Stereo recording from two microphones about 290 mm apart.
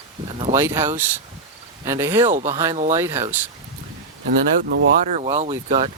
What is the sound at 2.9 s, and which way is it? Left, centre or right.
Speech, centre.